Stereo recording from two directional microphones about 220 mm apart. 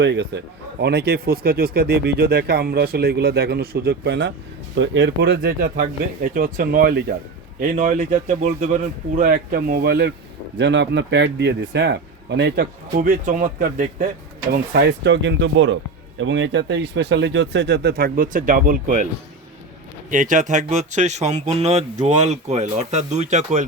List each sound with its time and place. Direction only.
0.0 s a man's voice: 50° right (ahead or behind)
20.1 s speech: 35° right (ahead or behind)